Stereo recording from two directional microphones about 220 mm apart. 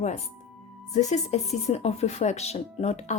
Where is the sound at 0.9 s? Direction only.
30° left (ahead or behind).